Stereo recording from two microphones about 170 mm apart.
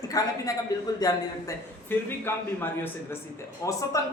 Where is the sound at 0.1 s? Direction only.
20° left (ahead or behind).